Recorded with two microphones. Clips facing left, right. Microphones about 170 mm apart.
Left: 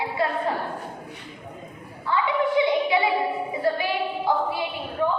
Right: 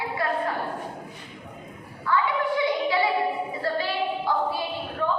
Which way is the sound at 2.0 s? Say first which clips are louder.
Left 1 dB; 20° left (ahead or behind).